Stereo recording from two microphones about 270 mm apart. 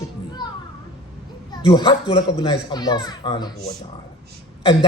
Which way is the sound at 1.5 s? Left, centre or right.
Centre.